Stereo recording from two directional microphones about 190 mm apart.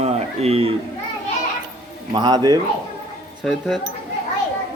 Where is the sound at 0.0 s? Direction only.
35° right (ahead or behind).